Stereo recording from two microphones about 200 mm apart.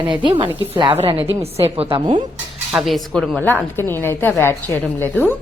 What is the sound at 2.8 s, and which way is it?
A woman's voice, centre (ahead or behind).